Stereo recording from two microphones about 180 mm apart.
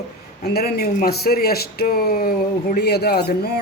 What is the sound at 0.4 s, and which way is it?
Speech, 60° left (ahead or behind).